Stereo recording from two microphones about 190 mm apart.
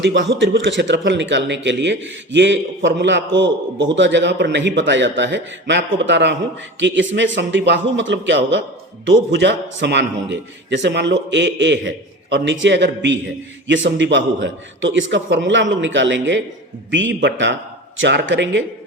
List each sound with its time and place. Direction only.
0.0 s a man's voice: 70° right (ahead or behind)